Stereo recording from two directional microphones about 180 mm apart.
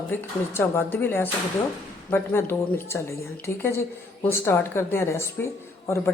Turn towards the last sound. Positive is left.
turn(degrees=15)  # may be behind; listen again after turning